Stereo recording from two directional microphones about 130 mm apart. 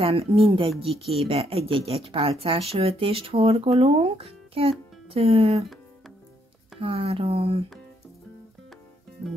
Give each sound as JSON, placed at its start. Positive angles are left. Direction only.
{"t": 0.0, "sound": "speech", "side_deg": -50}
{"t": 6.8, "sound": "speech", "side_deg": -45}